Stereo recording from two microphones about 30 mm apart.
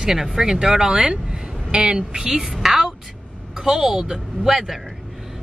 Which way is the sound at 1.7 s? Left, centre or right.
Right.